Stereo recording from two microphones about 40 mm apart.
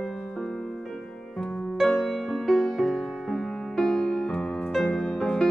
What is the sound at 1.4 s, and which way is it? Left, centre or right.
Music, centre.